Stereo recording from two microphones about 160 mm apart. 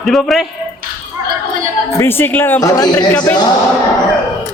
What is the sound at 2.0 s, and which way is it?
Speech, 15° left (ahead or behind).